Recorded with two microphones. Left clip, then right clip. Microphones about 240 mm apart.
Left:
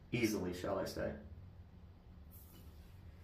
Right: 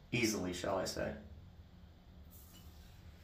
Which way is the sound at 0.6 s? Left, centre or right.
Centre.